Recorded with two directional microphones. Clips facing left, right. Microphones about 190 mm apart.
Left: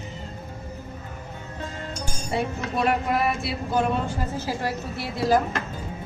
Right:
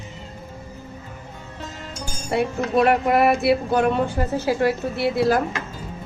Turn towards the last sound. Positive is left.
turn(degrees=-60)  # may be behind; listen again after turning